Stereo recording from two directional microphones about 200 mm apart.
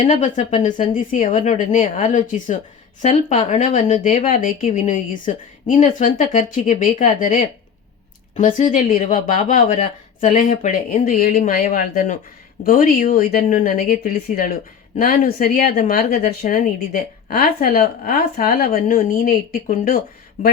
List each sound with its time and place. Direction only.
0.0 s speech: 40° left (ahead or behind)